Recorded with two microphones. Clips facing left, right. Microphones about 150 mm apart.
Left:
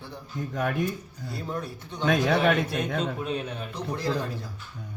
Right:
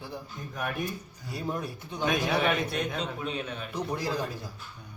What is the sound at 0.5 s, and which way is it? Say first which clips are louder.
Speech: left 5 dB; 90° left.